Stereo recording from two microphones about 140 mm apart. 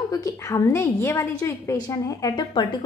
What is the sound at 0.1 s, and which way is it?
A woman's voice, 25° left (ahead or behind).